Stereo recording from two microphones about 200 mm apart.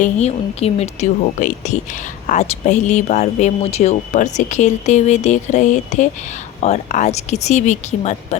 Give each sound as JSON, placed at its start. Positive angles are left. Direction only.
{"t": 0.0, "sound": "speech", "side_deg": 35}